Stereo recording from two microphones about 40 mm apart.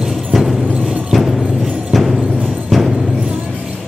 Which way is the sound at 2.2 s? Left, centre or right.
Right.